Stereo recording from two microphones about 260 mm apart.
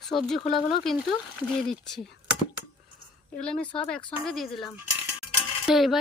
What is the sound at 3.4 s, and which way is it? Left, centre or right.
A woman's voice, centre.